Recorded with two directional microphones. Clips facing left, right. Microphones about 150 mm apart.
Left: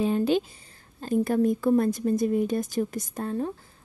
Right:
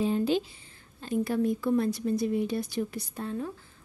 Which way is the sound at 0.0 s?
60° left (ahead or behind).